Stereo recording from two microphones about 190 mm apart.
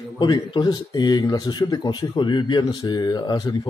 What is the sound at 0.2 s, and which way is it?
Speech, 20° left (ahead or behind).